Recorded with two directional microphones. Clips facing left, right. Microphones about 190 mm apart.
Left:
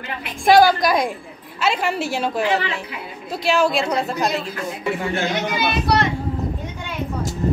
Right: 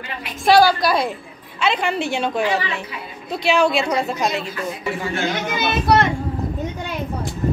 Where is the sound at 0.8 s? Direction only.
15° left (ahead or behind); by 4.3 s centre (ahead or behind).